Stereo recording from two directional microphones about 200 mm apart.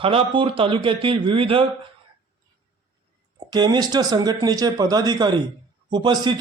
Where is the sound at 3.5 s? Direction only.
20° right (ahead or behind).